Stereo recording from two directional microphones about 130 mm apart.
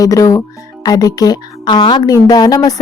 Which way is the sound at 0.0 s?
25° left (ahead or behind).